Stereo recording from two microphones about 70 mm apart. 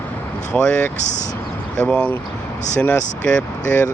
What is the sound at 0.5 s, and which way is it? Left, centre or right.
Speech, centre.